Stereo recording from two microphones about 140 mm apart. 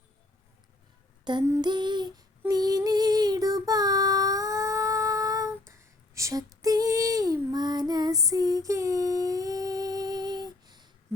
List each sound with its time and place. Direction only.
1.2 s female singing: 30° right (ahead or behind)
1.6 s a sound: 30° right (ahead or behind)
2.5 s child singing: 30° right (ahead or behind)